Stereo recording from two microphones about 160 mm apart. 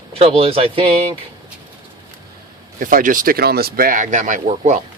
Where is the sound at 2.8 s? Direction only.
55° right (ahead or behind).